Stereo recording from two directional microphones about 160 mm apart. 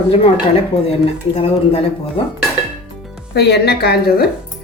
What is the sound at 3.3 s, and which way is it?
Speech, 85° left.